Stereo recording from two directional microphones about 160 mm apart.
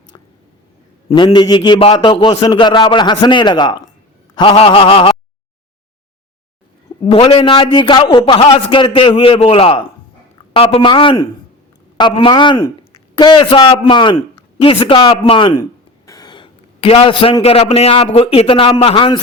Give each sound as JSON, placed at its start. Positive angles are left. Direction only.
{"t": 1.1, "sound": "a man's voice", "side_deg": 30}
{"t": 7.1, "sound": "a man's voice", "side_deg": 35}